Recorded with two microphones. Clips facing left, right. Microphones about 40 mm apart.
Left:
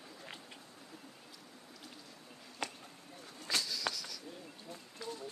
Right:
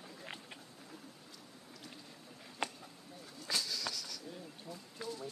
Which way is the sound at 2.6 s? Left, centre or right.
Right.